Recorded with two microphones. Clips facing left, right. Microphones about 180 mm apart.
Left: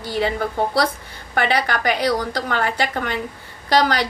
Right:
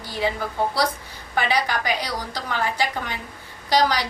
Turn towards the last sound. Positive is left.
turn(degrees=55)  # may be behind; listen again after turning